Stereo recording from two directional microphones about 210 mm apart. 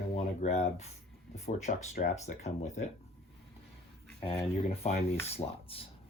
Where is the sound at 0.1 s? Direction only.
30° left (ahead or behind).